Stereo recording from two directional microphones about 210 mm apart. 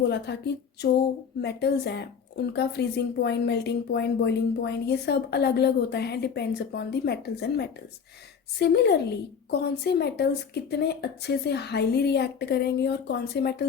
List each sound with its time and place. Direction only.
0.1 s speech: 50° left (ahead or behind)